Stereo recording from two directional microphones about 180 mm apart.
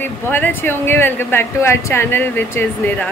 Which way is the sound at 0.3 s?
10° left (ahead or behind).